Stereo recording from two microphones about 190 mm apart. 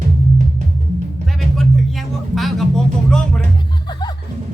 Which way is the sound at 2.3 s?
Centre (ahead or behind).